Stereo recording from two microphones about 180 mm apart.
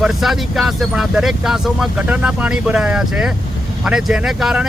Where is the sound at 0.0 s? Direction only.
Centre (ahead or behind).